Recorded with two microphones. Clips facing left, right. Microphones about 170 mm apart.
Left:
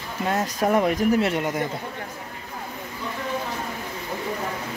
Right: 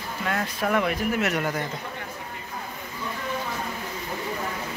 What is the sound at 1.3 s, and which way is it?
Speech, 20° left (ahead or behind).